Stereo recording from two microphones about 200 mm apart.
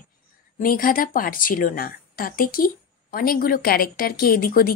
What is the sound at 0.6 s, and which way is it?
A woman's voice, 45° left (ahead or behind).